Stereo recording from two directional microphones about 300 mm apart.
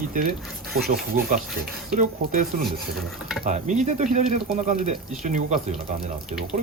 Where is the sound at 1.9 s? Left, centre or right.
Right.